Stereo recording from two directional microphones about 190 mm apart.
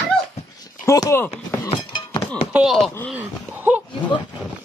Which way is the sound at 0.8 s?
15° left (ahead or behind).